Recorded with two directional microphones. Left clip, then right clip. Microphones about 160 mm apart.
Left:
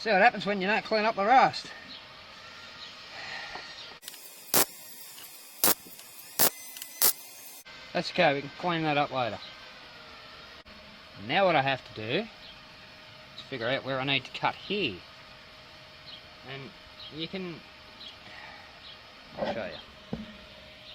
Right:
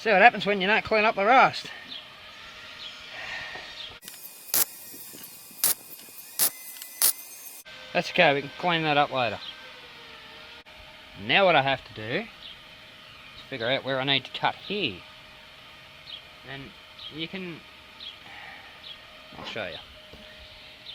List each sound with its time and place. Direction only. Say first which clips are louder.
0.0 s speech: right 5 dB; 50° right (ahead or behind)
4.5 s spray: left 3 dB; centre (ahead or behind)
5.6 s a sound: left 3 dB; centre (ahead or behind)
7.0 s camera: right 1 dB; centre (ahead or behind)
7.9 s speech: right 4 dB; 60° right (ahead or behind); by 9.4 s 45° right (ahead or behind)
11.3 s speech: right 4 dB; 50° right (ahead or behind)
11.5 s speech: right 4 dB; 30° right (ahead or behind)
13.5 s speech: right 3 dB; 30° right (ahead or behind)
17.2 s speech: right 1 dB; 30° right (ahead or behind)